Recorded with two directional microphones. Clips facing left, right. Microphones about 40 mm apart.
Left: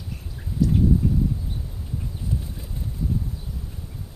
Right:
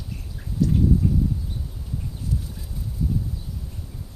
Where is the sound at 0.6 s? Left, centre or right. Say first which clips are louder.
Even; centre.